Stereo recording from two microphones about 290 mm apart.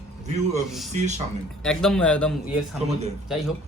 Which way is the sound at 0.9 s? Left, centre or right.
Right.